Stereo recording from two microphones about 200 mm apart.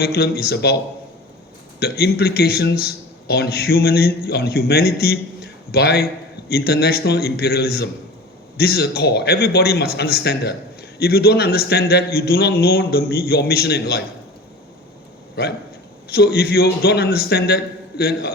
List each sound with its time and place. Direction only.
0.0 s a man's voice: 50° left (ahead or behind)
1.8 s a man's voice: 50° left (ahead or behind)
16.0 s a man's voice: 50° left (ahead or behind)